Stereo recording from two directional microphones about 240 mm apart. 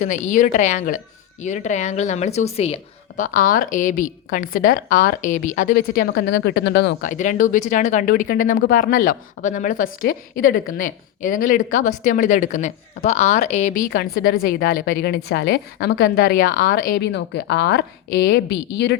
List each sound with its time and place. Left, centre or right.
0.0 s a woman's voice: left
7.1 s a woman's voice: left